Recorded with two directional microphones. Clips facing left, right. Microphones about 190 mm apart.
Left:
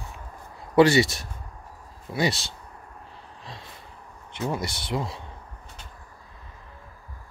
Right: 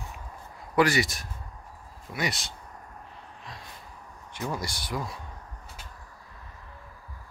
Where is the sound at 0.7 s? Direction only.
25° left (ahead or behind).